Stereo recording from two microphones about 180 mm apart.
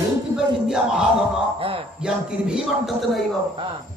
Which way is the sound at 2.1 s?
5° right (ahead or behind).